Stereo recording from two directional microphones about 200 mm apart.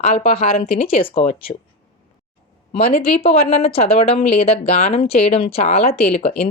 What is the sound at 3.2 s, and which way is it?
Speech, 30° left (ahead or behind).